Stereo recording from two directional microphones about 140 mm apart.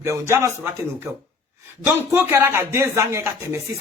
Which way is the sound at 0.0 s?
20° right (ahead or behind).